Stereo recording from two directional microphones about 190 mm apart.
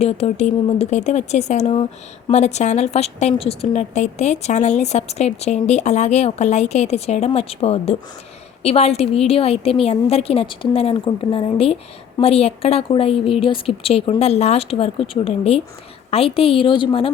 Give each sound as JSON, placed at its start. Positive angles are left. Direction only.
{"t": 0.0, "sound": "a woman's voice", "side_deg": 35}